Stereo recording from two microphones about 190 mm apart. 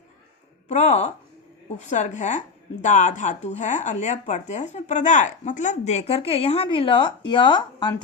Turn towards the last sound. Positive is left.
turn(degrees=25)  # may be behind; listen again after turning